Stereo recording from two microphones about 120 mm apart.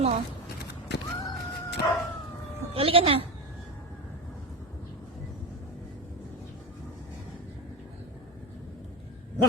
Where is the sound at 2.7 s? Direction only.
50° right (ahead or behind).